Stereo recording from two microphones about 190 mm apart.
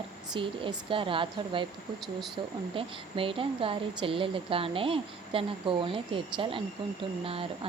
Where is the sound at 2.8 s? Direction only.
30° right (ahead or behind).